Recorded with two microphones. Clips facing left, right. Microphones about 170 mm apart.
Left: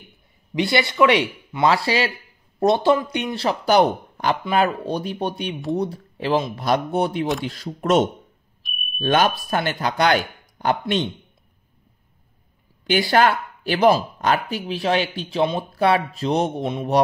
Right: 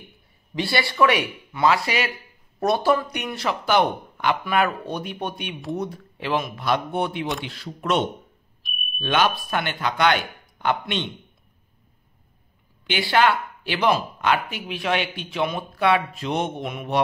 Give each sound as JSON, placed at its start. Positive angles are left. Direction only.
{"t": 0.6, "sound": "speech", "side_deg": 20}
{"t": 12.8, "sound": "speech", "side_deg": 45}